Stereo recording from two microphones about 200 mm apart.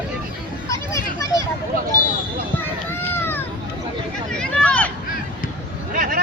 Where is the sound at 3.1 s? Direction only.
10° left (ahead or behind).